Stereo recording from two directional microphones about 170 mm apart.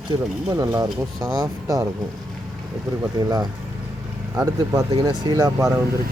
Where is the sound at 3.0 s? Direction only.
20° right (ahead or behind).